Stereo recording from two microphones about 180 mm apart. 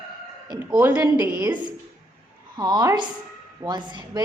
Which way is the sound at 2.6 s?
20° right (ahead or behind).